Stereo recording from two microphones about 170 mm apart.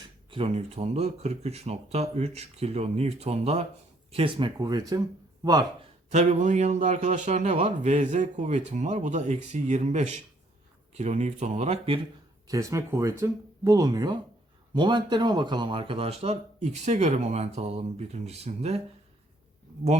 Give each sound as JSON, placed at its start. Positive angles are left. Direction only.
{"t": 0.3, "sound": "a man's voice", "side_deg": -35}
{"t": 6.1, "sound": "a man's voice", "side_deg": -45}
{"t": 12.5, "sound": "a man's voice", "side_deg": -20}